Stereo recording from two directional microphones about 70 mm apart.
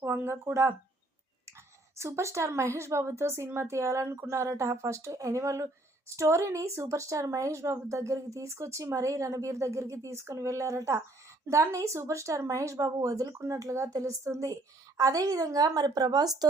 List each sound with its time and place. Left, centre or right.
0.0 s speech: right
2.0 s speech: right